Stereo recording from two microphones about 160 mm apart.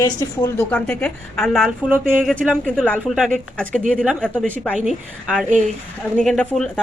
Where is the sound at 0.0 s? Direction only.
25° left (ahead or behind).